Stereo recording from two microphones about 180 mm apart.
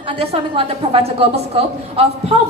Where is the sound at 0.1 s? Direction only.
30° right (ahead or behind).